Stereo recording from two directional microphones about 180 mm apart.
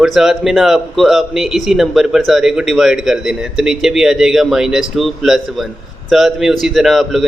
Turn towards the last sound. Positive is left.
turn(degrees=0)  # may be behind; listen again after turning